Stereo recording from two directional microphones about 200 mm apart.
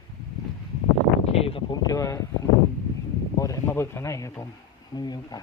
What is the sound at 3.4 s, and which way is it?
Speech, 15° left (ahead or behind).